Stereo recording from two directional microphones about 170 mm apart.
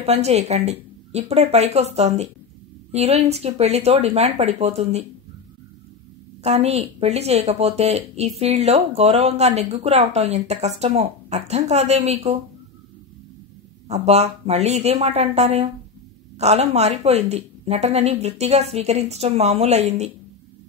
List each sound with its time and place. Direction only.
0.0 s a woman's voice: 40° right (ahead or behind)
6.4 s a woman's voice: 40° right (ahead or behind)
13.8 s a woman's voice: 40° right (ahead or behind)